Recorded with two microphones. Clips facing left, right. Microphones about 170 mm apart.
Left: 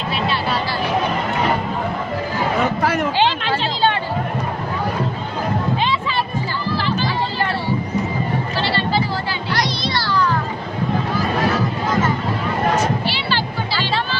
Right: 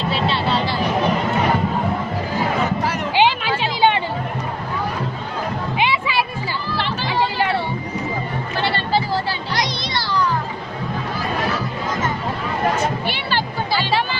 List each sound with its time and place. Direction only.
0.1 s vehicle: 25° right (ahead or behind)
3.2 s a sound: 10° right (ahead or behind)
5.7 s music: 10° right (ahead or behind)
8.5 s a sound: 50° right (ahead or behind)
9.6 s music: 20° right (ahead or behind)
13.1 s music: 50° right (ahead or behind)
13.7 s music: 15° right (ahead or behind)